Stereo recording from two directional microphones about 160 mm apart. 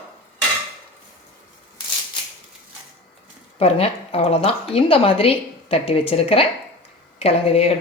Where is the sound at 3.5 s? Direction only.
40° left (ahead or behind).